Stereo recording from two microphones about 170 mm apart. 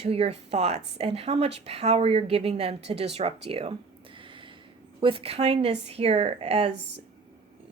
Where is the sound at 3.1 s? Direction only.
35° right (ahead or behind).